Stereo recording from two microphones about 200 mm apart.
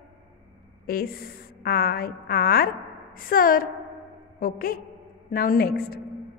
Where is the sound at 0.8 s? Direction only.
50° left (ahead or behind).